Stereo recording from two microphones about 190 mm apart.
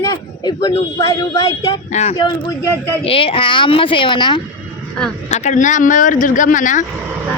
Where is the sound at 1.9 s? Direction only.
35° left (ahead or behind).